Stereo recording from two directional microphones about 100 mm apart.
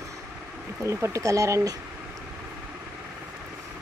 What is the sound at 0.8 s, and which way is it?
Speech, 30° right (ahead or behind).